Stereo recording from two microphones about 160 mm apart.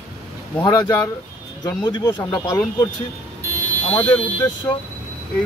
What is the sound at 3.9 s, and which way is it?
Speech, 10° left (ahead or behind).